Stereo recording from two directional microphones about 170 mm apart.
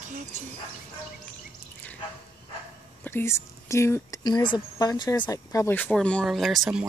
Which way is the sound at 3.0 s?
15° left (ahead or behind).